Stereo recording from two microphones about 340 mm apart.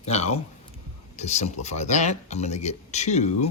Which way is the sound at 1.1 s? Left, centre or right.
Centre.